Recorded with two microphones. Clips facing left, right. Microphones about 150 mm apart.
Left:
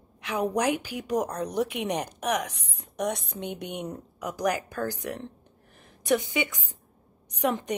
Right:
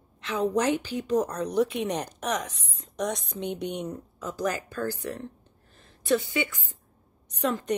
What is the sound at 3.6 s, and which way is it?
A woman's voice, 10° left (ahead or behind).